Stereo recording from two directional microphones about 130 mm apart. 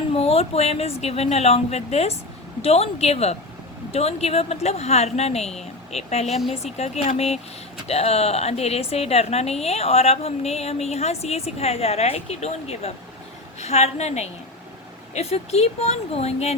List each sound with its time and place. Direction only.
0.1 s a woman's voice: 50° left (ahead or behind)